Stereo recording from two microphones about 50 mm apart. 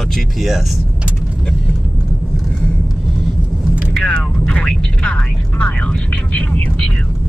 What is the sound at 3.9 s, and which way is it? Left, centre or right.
Speech, centre.